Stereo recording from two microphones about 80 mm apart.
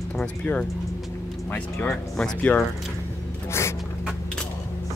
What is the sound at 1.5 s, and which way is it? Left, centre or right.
Speech, left.